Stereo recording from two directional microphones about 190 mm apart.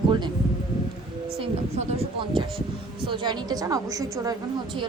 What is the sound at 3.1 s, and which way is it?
A woman's voice, 20° right (ahead or behind).